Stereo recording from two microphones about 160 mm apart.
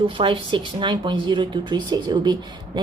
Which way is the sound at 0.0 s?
30° right (ahead or behind).